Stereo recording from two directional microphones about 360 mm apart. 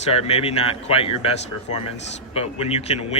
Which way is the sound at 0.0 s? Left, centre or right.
Centre.